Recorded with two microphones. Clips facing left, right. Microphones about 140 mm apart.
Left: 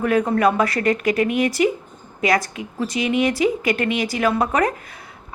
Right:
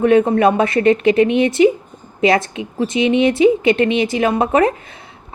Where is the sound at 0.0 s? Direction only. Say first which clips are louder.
Right 5 dB; 25° right (ahead or behind).